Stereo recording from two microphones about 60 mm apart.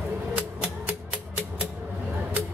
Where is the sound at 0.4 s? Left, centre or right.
Right.